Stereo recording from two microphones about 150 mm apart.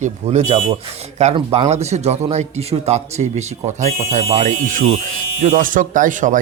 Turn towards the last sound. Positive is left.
turn(degrees=-60)  # may be behind; listen again after turning